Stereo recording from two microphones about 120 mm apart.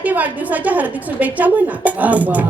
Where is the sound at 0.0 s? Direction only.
15° right (ahead or behind).